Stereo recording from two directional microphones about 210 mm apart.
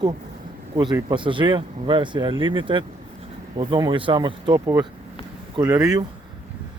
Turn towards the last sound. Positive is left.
turn(degrees=-15)  # may be behind; listen again after turning